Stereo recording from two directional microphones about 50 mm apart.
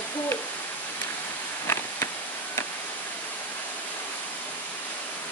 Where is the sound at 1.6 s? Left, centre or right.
Left.